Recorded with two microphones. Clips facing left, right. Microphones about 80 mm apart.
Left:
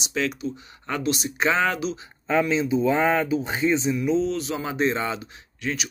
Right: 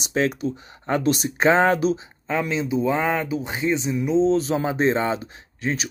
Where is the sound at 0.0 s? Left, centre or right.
Right.